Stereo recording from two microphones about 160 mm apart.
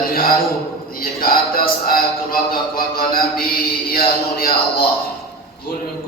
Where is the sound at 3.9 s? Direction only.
70° left (ahead or behind).